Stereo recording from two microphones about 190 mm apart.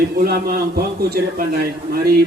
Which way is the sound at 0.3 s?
55° right (ahead or behind).